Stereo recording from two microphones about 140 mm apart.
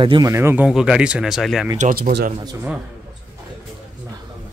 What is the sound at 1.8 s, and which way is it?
Speech, 80° right.